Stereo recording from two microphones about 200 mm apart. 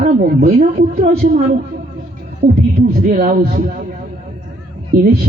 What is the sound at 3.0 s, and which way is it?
Speech, 45° right (ahead or behind).